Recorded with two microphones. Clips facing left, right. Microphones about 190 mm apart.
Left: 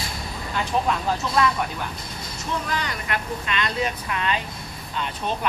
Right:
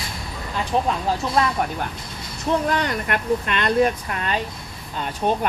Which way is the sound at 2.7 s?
55° right (ahead or behind).